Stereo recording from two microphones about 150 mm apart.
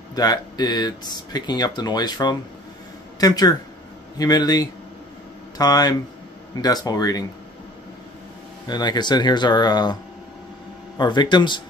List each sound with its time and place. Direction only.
0.1 s speech: 25° left (ahead or behind)
8.6 s speech: 30° left (ahead or behind)
11.0 s speech: 30° left (ahead or behind)